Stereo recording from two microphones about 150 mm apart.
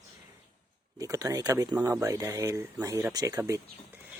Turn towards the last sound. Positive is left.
turn(degrees=-20)  # may be behind; listen again after turning